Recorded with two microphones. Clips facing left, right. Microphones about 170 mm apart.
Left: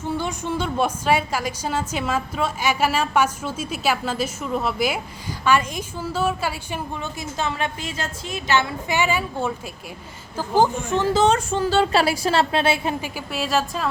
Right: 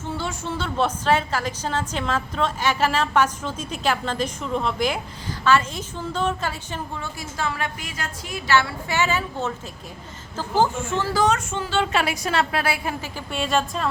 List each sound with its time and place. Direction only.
0.2 s a woman's voice: 15° left (ahead or behind)
13.1 s a woman's voice: centre (ahead or behind)